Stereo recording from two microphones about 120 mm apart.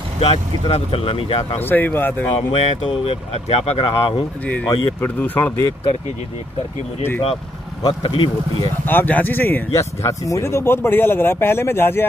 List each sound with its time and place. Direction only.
0.2 s speech: 55° left (ahead or behind)
1.6 s speech: 15° left (ahead or behind)
2.3 s speech: 50° left (ahead or behind)
4.6 s speech: 15° left (ahead or behind)
7.8 s speech: 45° left (ahead or behind)
8.8 s speech: 15° left (ahead or behind)